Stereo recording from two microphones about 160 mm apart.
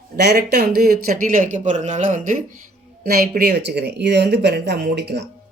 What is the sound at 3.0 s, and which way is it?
Speech, 80° right.